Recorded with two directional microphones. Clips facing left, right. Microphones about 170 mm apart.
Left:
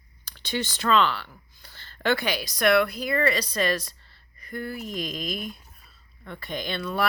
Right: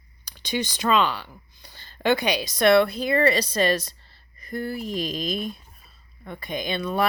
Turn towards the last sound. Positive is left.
turn(degrees=-15)  # may be behind; listen again after turning